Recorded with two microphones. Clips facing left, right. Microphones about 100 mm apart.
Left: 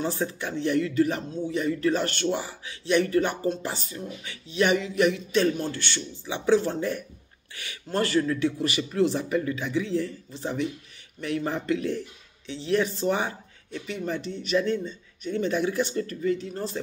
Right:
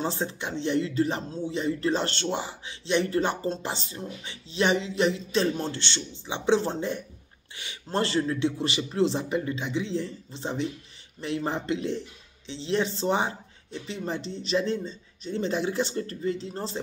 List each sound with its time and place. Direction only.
0.0 s speech: 25° right (ahead or behind)